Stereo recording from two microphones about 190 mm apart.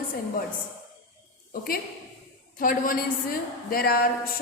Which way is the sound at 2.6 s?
45° left (ahead or behind).